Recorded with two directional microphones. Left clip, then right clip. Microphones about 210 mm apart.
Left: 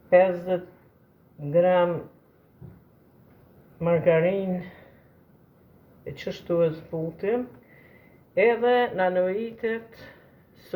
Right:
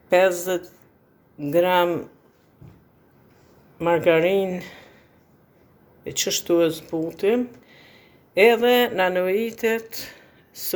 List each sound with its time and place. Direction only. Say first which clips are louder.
0.1 s speech: right 1 dB; 55° right (ahead or behind)
3.8 s speech: right 3 dB; 55° right (ahead or behind)
6.1 s speech: right 7 dB; 55° right (ahead or behind)